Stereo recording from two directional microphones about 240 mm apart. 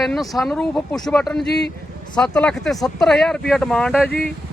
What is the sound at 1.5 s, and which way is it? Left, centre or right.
Speech, left.